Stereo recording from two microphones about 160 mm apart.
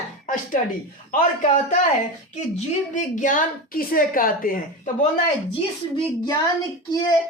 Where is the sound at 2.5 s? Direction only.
50° left (ahead or behind).